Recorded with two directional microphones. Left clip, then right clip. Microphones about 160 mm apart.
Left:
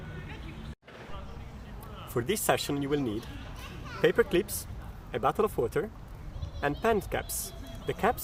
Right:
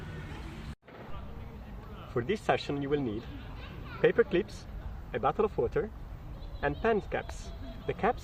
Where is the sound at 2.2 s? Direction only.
40° left (ahead or behind).